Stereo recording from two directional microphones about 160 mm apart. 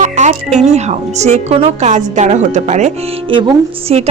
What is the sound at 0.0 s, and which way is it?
Speech, 45° right (ahead or behind).